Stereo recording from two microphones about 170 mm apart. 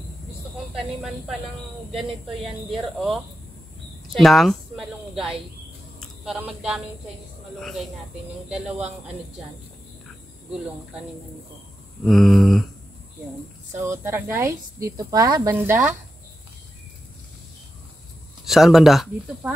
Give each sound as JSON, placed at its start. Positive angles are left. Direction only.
{"t": 1.9, "sound": "speech", "side_deg": 0}
{"t": 5.9, "sound": "a sound", "side_deg": -5}
{"t": 8.5, "sound": "speech", "side_deg": -5}
{"t": 12.0, "sound": "speech", "side_deg": 0}
{"t": 13.7, "sound": "a woman's voice", "side_deg": -15}
{"t": 18.4, "sound": "speech", "side_deg": 0}